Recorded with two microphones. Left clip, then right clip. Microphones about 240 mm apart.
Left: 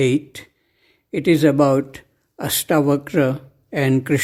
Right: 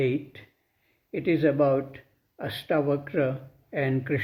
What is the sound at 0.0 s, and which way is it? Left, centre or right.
Speech, left.